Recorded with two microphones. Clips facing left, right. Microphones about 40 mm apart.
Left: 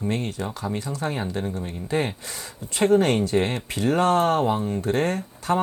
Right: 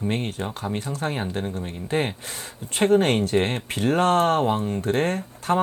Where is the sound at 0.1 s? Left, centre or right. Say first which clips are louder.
Even; right.